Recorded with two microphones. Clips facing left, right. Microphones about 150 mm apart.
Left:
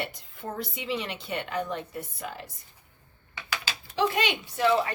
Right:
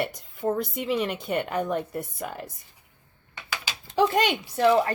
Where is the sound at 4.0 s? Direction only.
45° right (ahead or behind).